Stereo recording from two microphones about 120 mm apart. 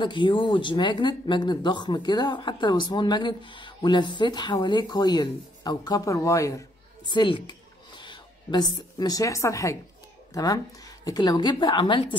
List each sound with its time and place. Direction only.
0.0 s speech: 40° left (ahead or behind); by 6.6 s 25° left (ahead or behind)
7.1 s speech: 40° left (ahead or behind)